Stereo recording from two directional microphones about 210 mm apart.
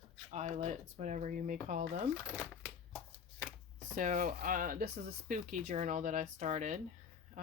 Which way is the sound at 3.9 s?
40° right (ahead or behind).